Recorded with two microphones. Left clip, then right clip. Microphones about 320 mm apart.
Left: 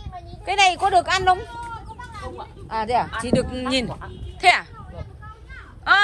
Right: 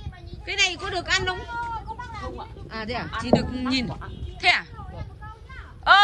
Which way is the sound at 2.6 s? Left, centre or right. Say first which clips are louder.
Left 10 dB; centre.